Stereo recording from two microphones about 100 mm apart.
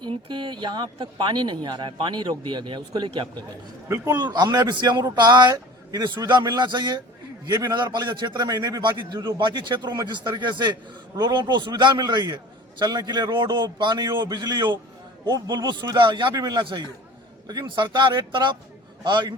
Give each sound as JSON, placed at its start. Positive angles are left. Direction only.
{"t": 0.1, "sound": "speech", "side_deg": -50}
{"t": 3.8, "sound": "speech", "side_deg": -30}